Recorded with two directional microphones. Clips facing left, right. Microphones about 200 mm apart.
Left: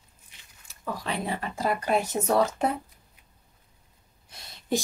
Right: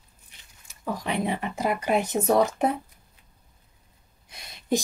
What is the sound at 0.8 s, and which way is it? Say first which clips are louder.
A woman's voice: right 4 dB; 15° right (ahead or behind).